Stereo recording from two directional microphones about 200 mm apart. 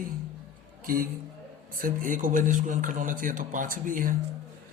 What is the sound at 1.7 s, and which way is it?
A man's voice, 45° right (ahead or behind).